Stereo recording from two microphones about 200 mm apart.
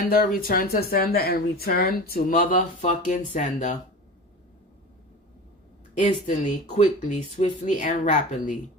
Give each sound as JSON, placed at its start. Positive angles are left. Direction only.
{"t": 0.3, "sound": "speech", "side_deg": 45}
{"t": 6.0, "sound": "speech", "side_deg": 40}